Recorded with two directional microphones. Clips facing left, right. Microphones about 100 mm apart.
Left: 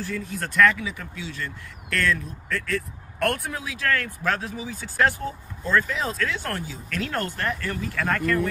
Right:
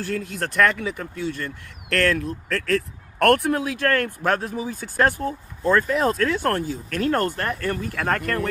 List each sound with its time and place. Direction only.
0.0 s speech: 70° right (ahead or behind); by 8.4 s 50° right (ahead or behind)